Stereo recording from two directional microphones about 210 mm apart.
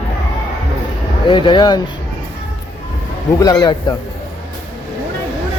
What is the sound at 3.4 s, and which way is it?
Speech, 15° left (ahead or behind).